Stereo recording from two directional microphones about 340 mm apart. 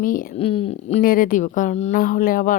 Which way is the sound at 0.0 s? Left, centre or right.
Left.